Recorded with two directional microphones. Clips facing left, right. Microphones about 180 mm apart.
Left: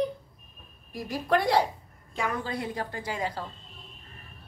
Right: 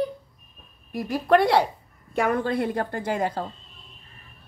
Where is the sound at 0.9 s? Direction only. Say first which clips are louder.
Right 6 dB; 60° right (ahead or behind).